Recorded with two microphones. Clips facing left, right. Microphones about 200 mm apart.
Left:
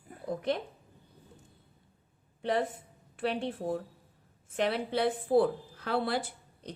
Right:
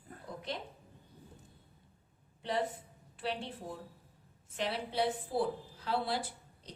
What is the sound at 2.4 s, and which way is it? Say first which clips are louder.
A woman's voice: left 5 dB; 55° left (ahead or behind).